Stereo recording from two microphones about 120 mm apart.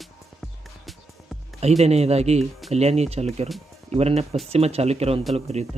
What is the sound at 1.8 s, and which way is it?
Speech, 60° right (ahead or behind).